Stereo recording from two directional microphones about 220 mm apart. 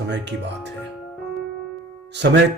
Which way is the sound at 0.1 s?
50° right (ahead or behind).